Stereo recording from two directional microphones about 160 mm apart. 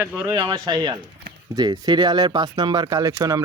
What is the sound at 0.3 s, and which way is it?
Speech, 25° right (ahead or behind).